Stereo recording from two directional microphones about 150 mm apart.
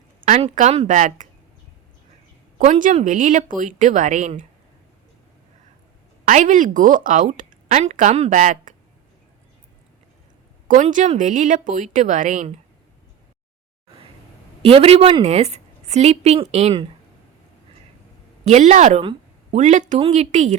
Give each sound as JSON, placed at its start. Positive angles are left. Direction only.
{"t": 0.3, "sound": "a woman's voice", "side_deg": -50}
{"t": 2.6, "sound": "a woman's voice", "side_deg": -60}
{"t": 6.2, "sound": "a woman's voice", "side_deg": -60}
{"t": 8.3, "sound": "a woman's voice", "side_deg": -60}
{"t": 10.8, "sound": "a woman's voice", "side_deg": -50}
{"t": 14.6, "sound": "a woman's voice", "side_deg": -40}
{"t": 18.4, "sound": "a woman's voice", "side_deg": -50}